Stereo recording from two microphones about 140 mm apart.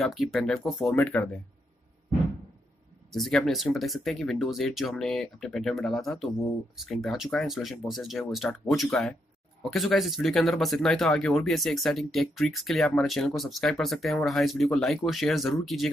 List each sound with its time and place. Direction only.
0.0 s speech: centre (ahead or behind)
0.9 s speech: 15° left (ahead or behind)
3.1 s speech: centre (ahead or behind)